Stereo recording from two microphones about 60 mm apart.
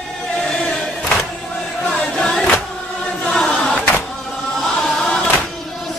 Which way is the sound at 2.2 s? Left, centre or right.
Centre.